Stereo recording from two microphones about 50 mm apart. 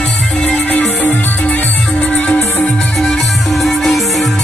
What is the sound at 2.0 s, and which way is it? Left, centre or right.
Music, left.